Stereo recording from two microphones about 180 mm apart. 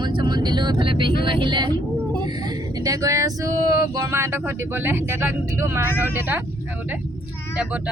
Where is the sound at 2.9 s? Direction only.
15° right (ahead or behind).